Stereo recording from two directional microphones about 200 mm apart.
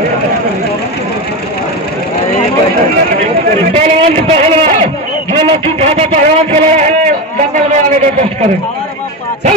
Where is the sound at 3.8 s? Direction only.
30° right (ahead or behind).